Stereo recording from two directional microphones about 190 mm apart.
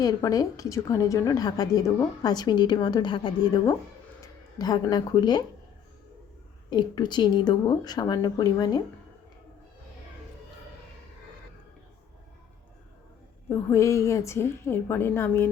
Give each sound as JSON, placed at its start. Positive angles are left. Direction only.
{"t": 0.0, "sound": "a woman's voice", "side_deg": 20}
{"t": 6.7, "sound": "a woman's voice", "side_deg": 20}
{"t": 13.5, "sound": "a woman's voice", "side_deg": 15}